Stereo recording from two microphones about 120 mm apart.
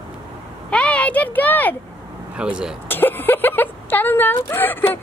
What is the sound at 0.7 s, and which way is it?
A child's voice, 10° left (ahead or behind).